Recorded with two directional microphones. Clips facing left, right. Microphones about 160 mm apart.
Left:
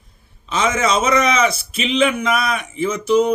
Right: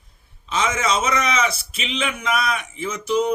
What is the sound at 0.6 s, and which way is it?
A man's voice, 55° left (ahead or behind).